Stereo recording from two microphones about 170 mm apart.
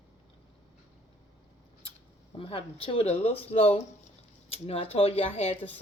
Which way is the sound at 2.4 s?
30° left (ahead or behind).